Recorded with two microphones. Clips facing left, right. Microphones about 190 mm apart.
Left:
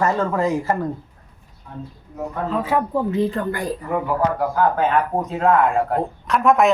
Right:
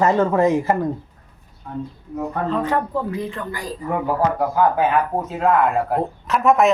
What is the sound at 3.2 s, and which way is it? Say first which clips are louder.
Speech: left 7 dB; 35° left (ahead or behind).